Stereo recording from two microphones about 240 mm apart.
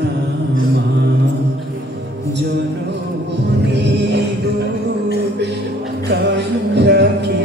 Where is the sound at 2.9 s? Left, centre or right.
Right.